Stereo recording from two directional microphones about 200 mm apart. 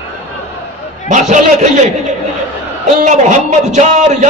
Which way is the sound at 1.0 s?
35° right (ahead or behind).